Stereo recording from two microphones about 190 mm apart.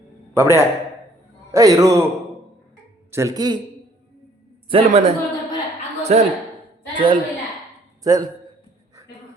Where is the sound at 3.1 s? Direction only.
15° right (ahead or behind).